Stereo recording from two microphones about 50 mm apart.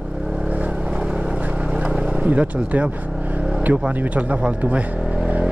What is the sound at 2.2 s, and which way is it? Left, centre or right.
Speech, right.